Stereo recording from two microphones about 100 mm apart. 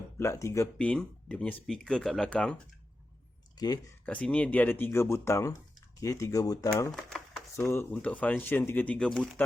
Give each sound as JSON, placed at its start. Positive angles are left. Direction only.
{"t": 0.2, "sound": "speech", "side_deg": 30}
{"t": 0.8, "sound": "speech", "side_deg": 15}
{"t": 4.0, "sound": "speech", "side_deg": 10}
{"t": 7.7, "sound": "speech", "side_deg": 20}